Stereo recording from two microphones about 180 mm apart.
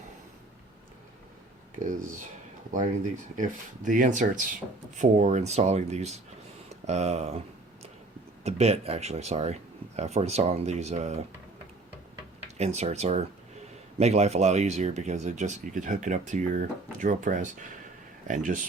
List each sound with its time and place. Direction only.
3.8 s speech: 45° right (ahead or behind)
8.4 s speech: 35° right (ahead or behind)
12.5 s speech: 35° right (ahead or behind)